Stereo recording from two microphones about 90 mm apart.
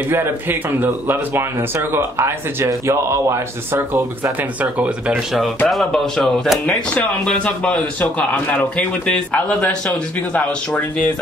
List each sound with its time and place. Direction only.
0.1 s speech: 25° right (ahead or behind)
5.1 s a man's voice: centre (ahead or behind)
6.6 s speech: 15° left (ahead or behind)